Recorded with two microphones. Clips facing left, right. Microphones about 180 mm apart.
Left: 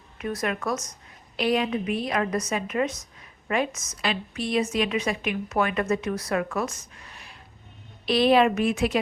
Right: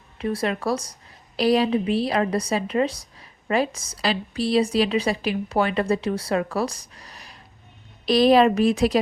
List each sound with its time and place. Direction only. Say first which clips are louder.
0.2 s a woman's voice: right 4 dB; 30° right (ahead or behind)